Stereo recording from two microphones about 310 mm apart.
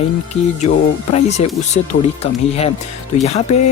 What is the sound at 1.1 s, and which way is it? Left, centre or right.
Speech, left.